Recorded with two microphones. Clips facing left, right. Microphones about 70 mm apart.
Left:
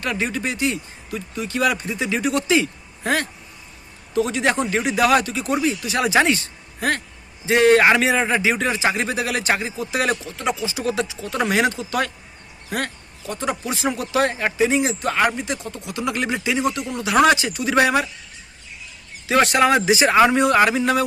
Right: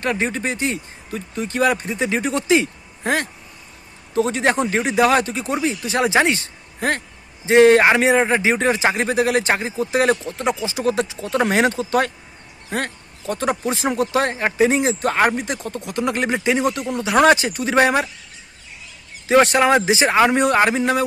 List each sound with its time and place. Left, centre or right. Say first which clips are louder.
0.0 s a man's voice: right 2 dB; right
4.1 s a man's voice: right 2 dB; right
12.7 s a sound: right 1 dB; right
13.3 s a man's voice: right 4 dB; right
19.5 s speech: right 1 dB; right